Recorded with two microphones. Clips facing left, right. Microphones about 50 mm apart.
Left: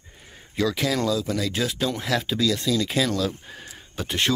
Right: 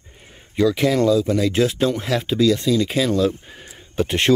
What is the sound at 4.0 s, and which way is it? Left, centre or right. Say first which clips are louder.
Speech: right 7 dB; right.